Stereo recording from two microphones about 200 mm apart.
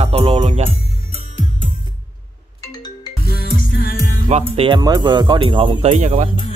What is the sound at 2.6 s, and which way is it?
Music, 20° left (ahead or behind).